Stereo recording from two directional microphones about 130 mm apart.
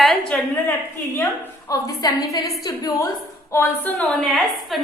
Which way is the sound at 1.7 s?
25° left (ahead or behind).